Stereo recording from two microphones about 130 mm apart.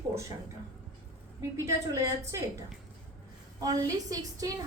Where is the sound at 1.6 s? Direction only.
25° right (ahead or behind).